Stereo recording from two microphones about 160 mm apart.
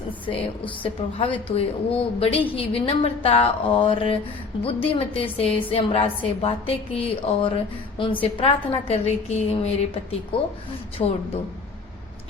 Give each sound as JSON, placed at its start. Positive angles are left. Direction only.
{"t": 0.3, "sound": "a woman's voice", "side_deg": 35}